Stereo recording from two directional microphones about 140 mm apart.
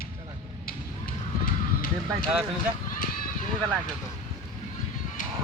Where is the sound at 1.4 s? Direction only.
90° left.